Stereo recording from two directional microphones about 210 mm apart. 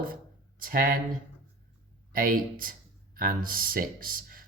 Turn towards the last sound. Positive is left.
turn(degrees=-40)  # may be behind; listen again after turning